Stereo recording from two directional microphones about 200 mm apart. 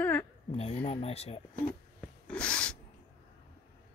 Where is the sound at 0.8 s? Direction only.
30° left (ahead or behind).